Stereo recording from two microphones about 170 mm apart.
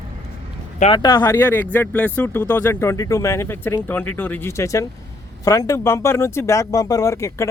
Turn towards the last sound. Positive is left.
turn(degrees=15)  # may be behind; listen again after turning